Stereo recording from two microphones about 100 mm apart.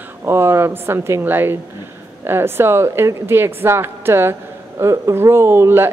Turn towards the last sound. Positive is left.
turn(degrees=-25)  # may be behind; listen again after turning